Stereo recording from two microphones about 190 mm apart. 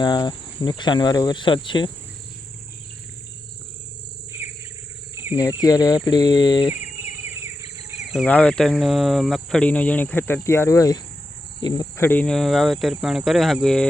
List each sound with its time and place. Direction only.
0.0 s cricket: 20° left (ahead or behind)
5.1 s cricket: 10° right (ahead or behind)
5.6 s cricket: 20° left (ahead or behind)
7.0 s a sound: 15° right (ahead or behind)
8.1 s speech: 5° left (ahead or behind); by 11.0 s 20° left (ahead or behind)
11.6 s cricket: 20° left (ahead or behind); by 13.8 s 5° left (ahead or behind)